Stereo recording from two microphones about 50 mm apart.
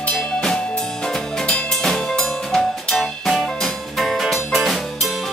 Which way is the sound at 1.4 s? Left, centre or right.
Centre.